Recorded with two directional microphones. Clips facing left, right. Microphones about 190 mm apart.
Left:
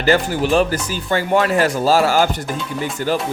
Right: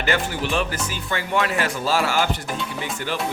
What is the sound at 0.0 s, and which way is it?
Speech, 35° left (ahead or behind).